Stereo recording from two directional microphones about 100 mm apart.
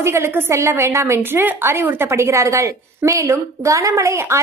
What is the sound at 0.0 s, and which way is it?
A woman's voice, 25° right (ahead or behind).